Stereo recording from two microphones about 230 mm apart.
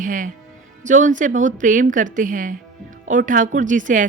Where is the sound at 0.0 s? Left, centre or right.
Right.